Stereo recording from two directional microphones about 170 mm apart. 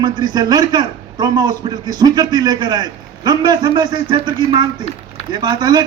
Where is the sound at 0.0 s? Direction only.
25° right (ahead or behind).